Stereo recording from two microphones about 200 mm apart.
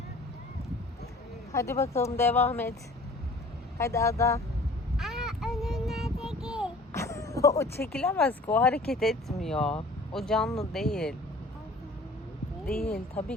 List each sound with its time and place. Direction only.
1.5 s speech: 15° left (ahead or behind)
3.8 s speech: 15° left (ahead or behind)
4.9 s child singing: centre (ahead or behind)
6.9 s a sound: 15° left (ahead or behind)
7.9 s speech: 5° left (ahead or behind)
12.6 s speech: 45° left (ahead or behind)